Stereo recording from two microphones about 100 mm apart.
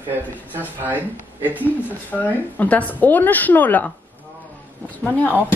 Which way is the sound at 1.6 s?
15° left (ahead or behind).